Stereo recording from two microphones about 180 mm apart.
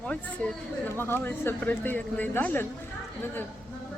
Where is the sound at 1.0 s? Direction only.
10° left (ahead or behind).